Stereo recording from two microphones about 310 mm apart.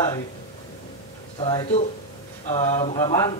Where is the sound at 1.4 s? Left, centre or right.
Centre.